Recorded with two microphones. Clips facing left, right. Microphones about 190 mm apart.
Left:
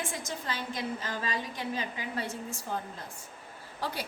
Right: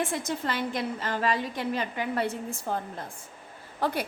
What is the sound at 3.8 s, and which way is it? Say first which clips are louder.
Speech: right 7 dB; 55° right (ahead or behind).